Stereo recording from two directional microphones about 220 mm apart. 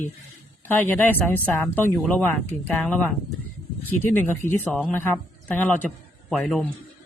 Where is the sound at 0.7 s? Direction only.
10° left (ahead or behind).